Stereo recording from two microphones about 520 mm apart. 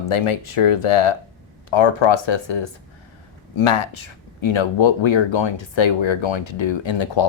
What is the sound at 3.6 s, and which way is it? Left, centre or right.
Speech, left.